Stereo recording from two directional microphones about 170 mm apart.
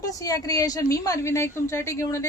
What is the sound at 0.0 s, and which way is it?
A woman's voice, 20° left (ahead or behind).